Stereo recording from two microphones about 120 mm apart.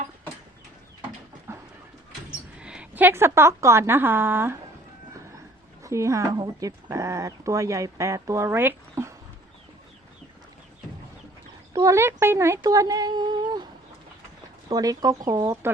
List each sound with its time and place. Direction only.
1.5 s a sound: 20° right (ahead or behind)
2.6 s speech: 10° right (ahead or behind)
5.8 s speech: 25° right (ahead or behind)
11.7 s speech: 25° right (ahead or behind)
14.7 s speech: 30° right (ahead or behind)